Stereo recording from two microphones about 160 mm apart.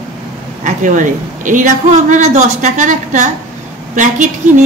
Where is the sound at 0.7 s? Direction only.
55° right (ahead or behind).